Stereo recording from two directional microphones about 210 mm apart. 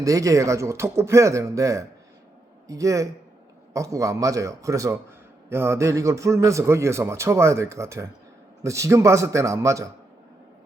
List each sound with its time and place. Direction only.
0.0 s a man's voice: 15° right (ahead or behind)